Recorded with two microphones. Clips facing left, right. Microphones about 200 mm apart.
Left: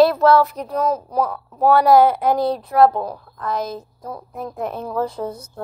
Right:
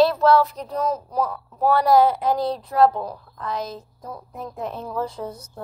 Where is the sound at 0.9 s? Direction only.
65° left (ahead or behind).